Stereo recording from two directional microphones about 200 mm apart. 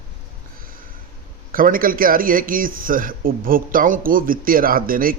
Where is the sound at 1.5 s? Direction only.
45° right (ahead or behind).